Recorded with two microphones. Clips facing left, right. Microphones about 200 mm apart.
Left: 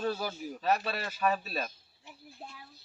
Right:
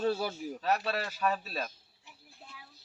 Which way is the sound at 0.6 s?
5° left (ahead or behind).